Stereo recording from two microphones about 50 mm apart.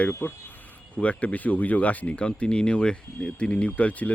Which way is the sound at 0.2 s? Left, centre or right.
Left.